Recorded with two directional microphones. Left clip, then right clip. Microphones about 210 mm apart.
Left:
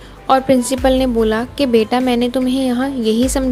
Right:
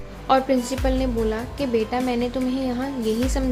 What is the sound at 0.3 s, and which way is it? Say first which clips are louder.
A woman's voice: left 6 dB; 35° left (ahead or behind).